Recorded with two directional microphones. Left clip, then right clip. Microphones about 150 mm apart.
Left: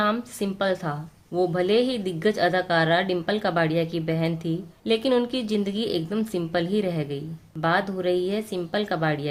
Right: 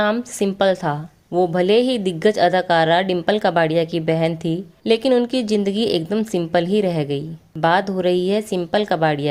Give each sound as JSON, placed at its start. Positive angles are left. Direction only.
{"t": 0.0, "sound": "a woman's voice", "side_deg": -40}